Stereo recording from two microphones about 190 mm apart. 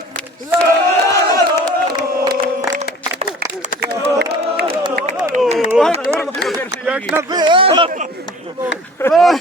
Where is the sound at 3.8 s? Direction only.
60° right (ahead or behind).